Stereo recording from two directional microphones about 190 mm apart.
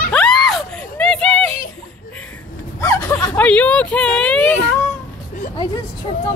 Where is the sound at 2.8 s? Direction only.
15° left (ahead or behind).